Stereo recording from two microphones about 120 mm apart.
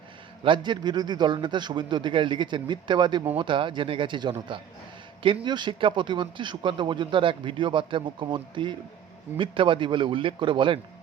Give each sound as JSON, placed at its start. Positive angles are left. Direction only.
{"t": 0.4, "sound": "speech", "side_deg": -40}